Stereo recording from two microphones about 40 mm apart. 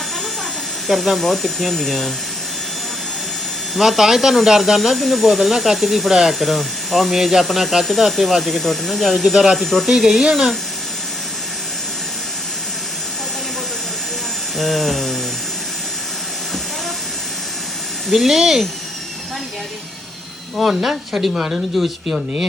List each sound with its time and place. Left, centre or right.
0.9 s speech: centre
3.8 s speech: centre
6.4 s speech: centre
9.8 s speech: centre
14.6 s speech: centre
18.1 s speech: centre
20.6 s speech: centre
21.5 s speech: centre